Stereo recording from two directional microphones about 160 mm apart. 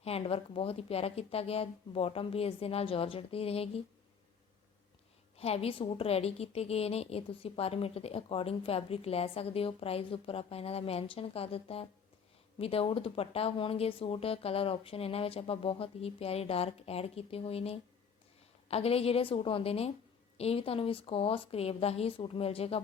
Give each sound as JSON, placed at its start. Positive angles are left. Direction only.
{"t": 0.0, "sound": "a woman's voice", "side_deg": 40}
{"t": 5.4, "sound": "a woman's voice", "side_deg": 40}